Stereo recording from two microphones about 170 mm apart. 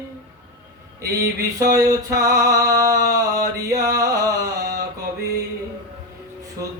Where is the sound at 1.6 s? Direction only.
20° right (ahead or behind).